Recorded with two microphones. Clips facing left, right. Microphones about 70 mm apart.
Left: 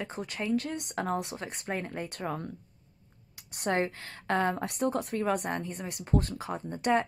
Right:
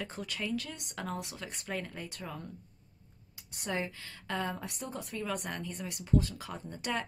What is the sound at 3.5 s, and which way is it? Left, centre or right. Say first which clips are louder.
A woman's voice: left 7 dB; left.